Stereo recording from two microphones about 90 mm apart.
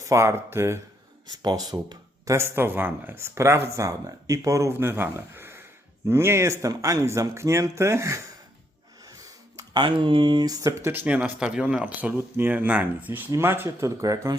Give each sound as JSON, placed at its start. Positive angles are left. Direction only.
{"t": 0.0, "sound": "speech", "side_deg": -35}
{"t": 1.4, "sound": "speech", "side_deg": -45}
{"t": 2.3, "sound": "speech", "side_deg": -25}
{"t": 9.0, "sound": "a sound", "side_deg": -40}
{"t": 9.8, "sound": "speech", "side_deg": -65}
{"t": 11.0, "sound": "speech", "side_deg": -15}